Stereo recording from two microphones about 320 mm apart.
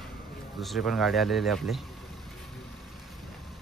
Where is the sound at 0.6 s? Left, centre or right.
Centre.